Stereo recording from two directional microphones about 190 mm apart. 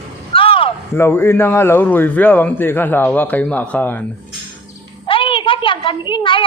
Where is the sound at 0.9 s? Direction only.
10° left (ahead or behind).